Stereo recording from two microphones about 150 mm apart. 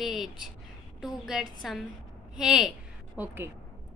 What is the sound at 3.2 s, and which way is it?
Speech, 15° right (ahead or behind).